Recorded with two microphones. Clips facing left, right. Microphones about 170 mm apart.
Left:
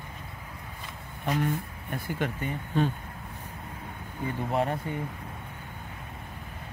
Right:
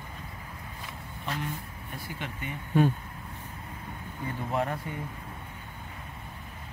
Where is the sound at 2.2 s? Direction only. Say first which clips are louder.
Left 7 dB; 40° left (ahead or behind).